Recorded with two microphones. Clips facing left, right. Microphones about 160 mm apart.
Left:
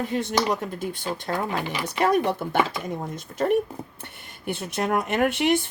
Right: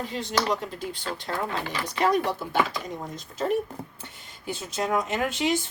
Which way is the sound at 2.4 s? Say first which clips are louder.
Left 2 dB; 55° left (ahead or behind).